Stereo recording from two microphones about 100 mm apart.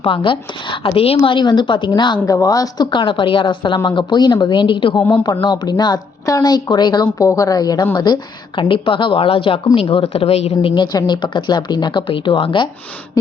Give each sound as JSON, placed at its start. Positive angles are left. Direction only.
{"t": 0.0, "sound": "a woman's voice", "side_deg": 60}
{"t": 2.2, "sound": "speech", "side_deg": 35}
{"t": 2.9, "sound": "a woman's voice", "side_deg": 60}
{"t": 5.2, "sound": "a woman's voice", "side_deg": 45}
{"t": 9.9, "sound": "a woman's voice", "side_deg": 75}
{"t": 10.8, "sound": "a woman's voice", "side_deg": 45}